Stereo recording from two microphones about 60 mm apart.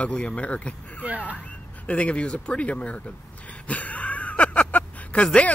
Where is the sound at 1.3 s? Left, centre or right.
Left.